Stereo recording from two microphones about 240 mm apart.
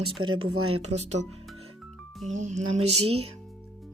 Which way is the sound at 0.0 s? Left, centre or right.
Right.